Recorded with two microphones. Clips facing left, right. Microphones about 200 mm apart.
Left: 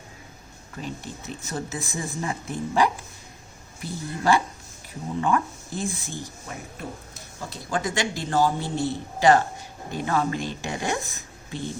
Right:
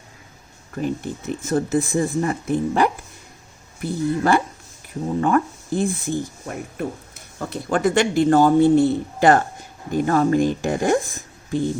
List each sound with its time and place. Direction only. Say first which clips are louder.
0.8 s speech: right 10 dB; 55° right (ahead or behind)